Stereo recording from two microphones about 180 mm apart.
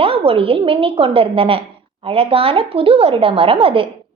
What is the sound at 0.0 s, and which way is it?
A woman's voice, 30° right (ahead or behind).